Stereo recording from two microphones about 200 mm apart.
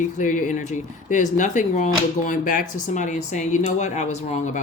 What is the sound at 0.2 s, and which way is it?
Speech, 40° left (ahead or behind).